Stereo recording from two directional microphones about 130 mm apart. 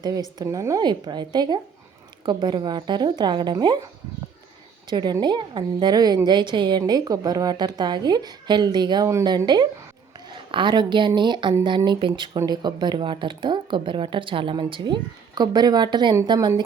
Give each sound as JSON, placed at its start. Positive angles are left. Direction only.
{"t": 0.3, "sound": "speech", "side_deg": -25}
{"t": 4.9, "sound": "speech", "side_deg": -35}